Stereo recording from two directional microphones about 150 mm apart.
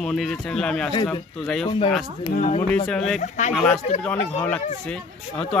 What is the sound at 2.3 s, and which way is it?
Speech, 50° left (ahead or behind).